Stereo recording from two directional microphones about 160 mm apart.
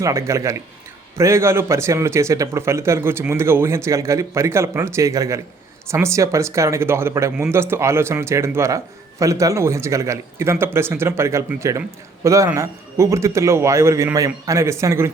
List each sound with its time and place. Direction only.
0.0 s a man's voice: 20° right (ahead or behind)